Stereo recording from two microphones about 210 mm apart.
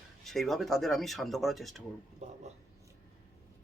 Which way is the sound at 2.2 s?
30° right (ahead or behind).